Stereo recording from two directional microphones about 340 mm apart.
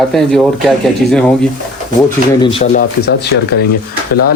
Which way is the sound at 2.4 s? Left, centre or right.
Centre.